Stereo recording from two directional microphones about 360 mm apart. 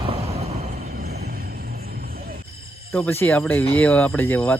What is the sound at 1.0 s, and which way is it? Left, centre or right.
Music, right.